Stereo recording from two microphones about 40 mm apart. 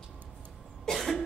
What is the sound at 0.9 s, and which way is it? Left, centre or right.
Cough, centre.